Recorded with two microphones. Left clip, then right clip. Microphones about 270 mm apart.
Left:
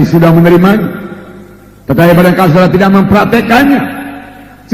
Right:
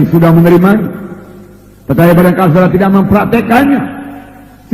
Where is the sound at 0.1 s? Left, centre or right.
Left.